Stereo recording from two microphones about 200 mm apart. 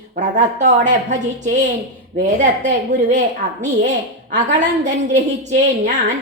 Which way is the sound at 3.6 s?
35° right (ahead or behind).